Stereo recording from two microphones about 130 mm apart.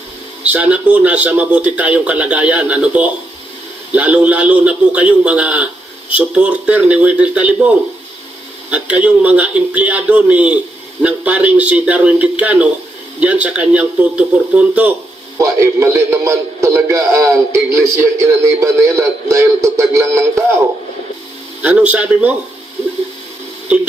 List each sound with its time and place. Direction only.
0.4 s a man's voice: 10° right (ahead or behind)
8.7 s a man's voice: 10° right (ahead or behind)
15.4 s a man's voice: 20° right (ahead or behind)